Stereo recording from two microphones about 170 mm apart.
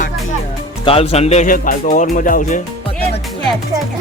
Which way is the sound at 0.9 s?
35° left (ahead or behind).